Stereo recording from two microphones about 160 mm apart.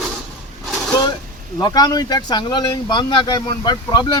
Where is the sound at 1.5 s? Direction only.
25° left (ahead or behind).